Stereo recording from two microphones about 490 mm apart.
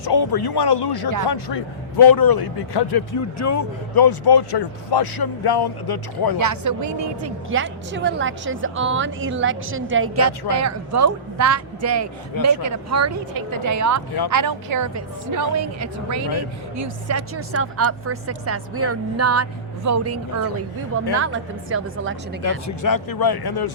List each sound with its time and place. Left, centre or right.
0.0 s a man's voice: left
6.4 s a man's voice: right
7.2 s a woman's voice: right
22.8 s a man's voice: left